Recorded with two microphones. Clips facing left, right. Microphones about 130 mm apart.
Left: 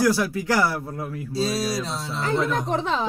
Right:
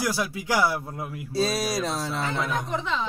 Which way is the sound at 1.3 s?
60° right (ahead or behind).